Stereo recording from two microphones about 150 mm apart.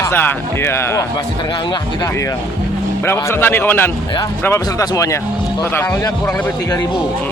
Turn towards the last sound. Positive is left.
turn(degrees=15)  # may be behind; listen again after turning